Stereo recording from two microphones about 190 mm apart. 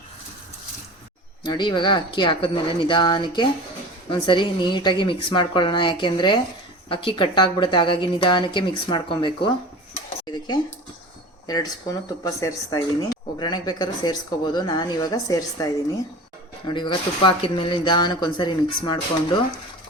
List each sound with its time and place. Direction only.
1.5 s speech: 25° left (ahead or behind)
10.3 s a sound: 20° left (ahead or behind)
11.4 s speech: 20° left (ahead or behind)